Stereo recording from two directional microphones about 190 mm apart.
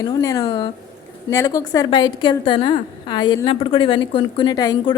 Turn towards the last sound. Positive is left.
turn(degrees=20)  # may be behind; listen again after turning